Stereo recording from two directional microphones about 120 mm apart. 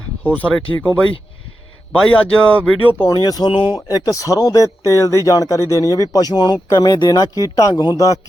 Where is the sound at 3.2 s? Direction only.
35° left (ahead or behind).